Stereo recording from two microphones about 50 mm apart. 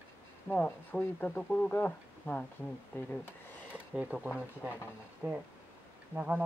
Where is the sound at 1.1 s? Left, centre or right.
Left.